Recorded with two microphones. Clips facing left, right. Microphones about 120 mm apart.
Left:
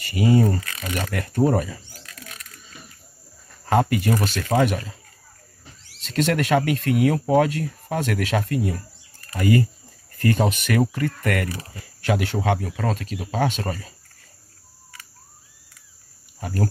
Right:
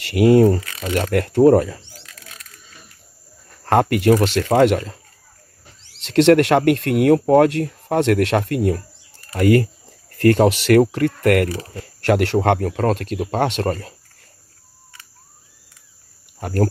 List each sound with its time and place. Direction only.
0.0 s speech: 65° right (ahead or behind)
3.6 s speech: 65° right (ahead or behind)
5.9 s speech: 75° right (ahead or behind)
16.3 s speech: 60° right (ahead or behind)